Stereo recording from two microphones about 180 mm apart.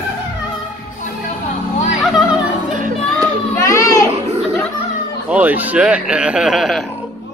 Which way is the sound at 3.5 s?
15° left (ahead or behind).